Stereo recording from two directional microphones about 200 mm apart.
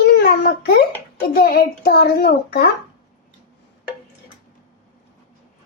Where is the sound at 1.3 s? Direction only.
50° left (ahead or behind).